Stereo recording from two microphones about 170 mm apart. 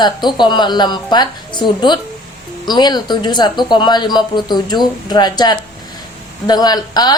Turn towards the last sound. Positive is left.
turn(degrees=25)  # may be behind; listen again after turning